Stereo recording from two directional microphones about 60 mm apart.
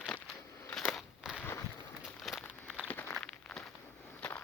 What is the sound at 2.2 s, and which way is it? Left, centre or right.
Walk, centre.